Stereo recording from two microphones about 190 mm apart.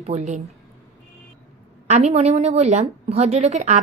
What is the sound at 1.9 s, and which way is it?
Speech, 35° right (ahead or behind).